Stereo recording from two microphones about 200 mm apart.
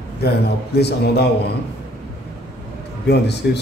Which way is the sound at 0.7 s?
55° left (ahead or behind).